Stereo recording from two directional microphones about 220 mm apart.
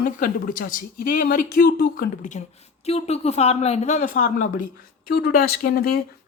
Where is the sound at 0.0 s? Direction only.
40° left (ahead or behind).